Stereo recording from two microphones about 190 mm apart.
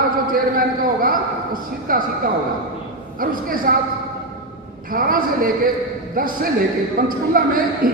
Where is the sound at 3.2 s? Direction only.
50° right (ahead or behind).